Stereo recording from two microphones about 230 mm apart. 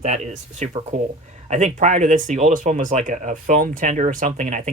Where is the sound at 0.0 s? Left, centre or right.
Right.